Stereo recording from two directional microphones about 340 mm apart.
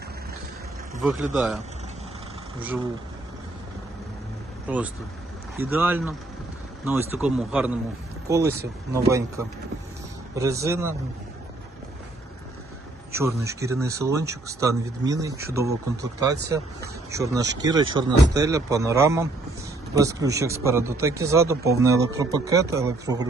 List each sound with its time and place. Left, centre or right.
1.0 s speech: centre
4.7 s speech: centre
13.1 s speech: centre